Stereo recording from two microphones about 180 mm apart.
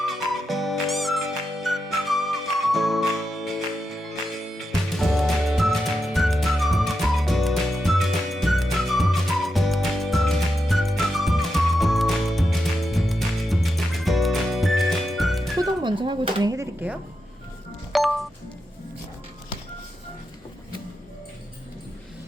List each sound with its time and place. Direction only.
0.0 s music: centre (ahead or behind)
15.6 s a sound: 25° right (ahead or behind)
17.9 s music: centre (ahead or behind)